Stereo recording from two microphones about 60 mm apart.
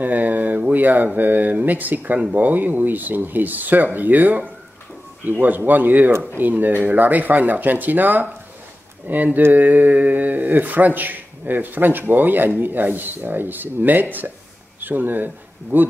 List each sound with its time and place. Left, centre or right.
0.0 s speech: right